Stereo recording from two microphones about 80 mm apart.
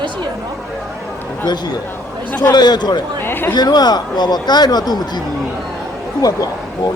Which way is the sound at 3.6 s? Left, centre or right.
Left.